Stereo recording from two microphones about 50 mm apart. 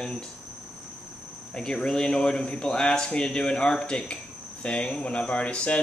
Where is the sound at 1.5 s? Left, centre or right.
Centre.